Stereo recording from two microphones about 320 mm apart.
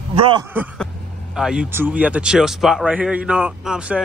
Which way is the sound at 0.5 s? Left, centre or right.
Centre.